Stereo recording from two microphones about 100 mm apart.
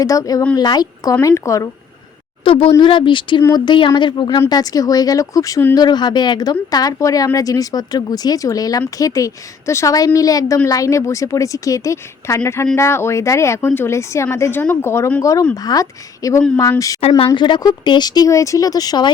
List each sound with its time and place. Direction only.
0.0 s speech: 35° left (ahead or behind)
1.2 s speech: 35° left (ahead or behind)
2.4 s speech: 65° left (ahead or behind)
2.8 s speech: 55° left (ahead or behind); by 17.0 s 35° left (ahead or behind)
17.3 s speech: 50° left (ahead or behind)